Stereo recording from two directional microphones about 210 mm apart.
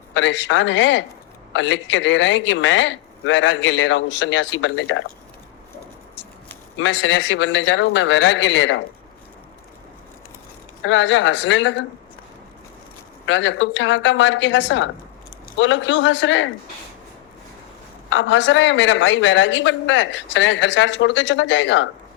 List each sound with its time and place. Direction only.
0.1 s a man's voice: 60° left (ahead or behind)
6.7 s a man's voice: 60° left (ahead or behind)
10.8 s a man's voice: 65° left (ahead or behind)
13.2 s a man's voice: 60° left (ahead or behind)
18.1 s a man's voice: 65° left (ahead or behind)